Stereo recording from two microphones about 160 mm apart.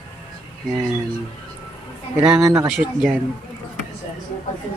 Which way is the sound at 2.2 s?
5° right (ahead or behind).